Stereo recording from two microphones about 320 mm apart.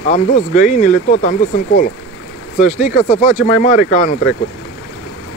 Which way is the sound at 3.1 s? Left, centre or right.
Left.